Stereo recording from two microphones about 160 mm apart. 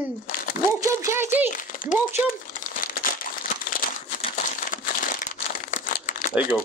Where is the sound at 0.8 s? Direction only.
15° right (ahead or behind).